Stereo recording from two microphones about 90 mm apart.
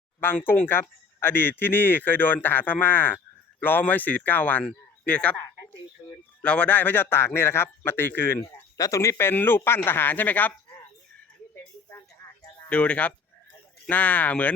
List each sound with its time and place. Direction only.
0.4 s speech: 20° left (ahead or behind)
6.4 s speech: 15° left (ahead or behind)
12.6 s speech: 15° left (ahead or behind)